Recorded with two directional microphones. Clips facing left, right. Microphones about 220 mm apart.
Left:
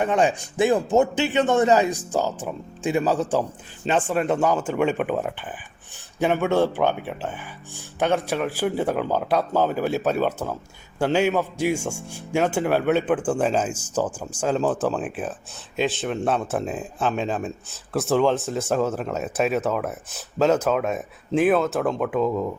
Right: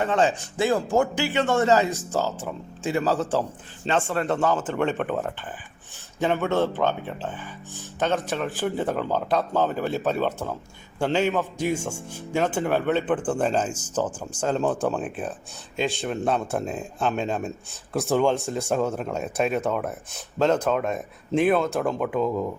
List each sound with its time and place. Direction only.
0.0 s speech: 15° left (ahead or behind)